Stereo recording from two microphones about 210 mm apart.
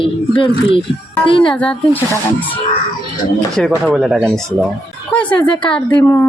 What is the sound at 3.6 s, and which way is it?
Speech, 5° left (ahead or behind).